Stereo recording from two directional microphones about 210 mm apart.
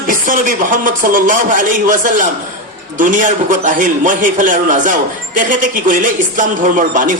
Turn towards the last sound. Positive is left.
turn(degrees=-40)  # may be behind; listen again after turning